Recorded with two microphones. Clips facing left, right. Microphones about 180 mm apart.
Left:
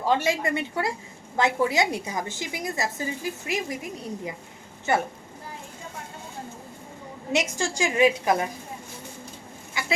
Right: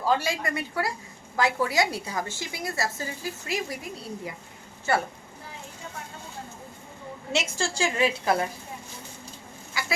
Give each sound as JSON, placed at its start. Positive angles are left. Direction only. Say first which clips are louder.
{"t": 0.0, "sound": "a woman's voice", "louder": "left 2 dB", "side_deg": 25}
{"t": 7.3, "sound": "a woman's voice", "louder": "left 2 dB", "side_deg": 15}
{"t": 9.7, "sound": "chicken", "louder": "left 1 dB", "side_deg": 20}